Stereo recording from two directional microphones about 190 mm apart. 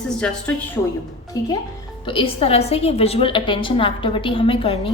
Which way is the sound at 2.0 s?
30° left (ahead or behind).